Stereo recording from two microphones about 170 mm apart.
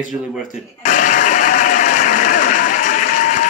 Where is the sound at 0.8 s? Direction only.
50° left (ahead or behind).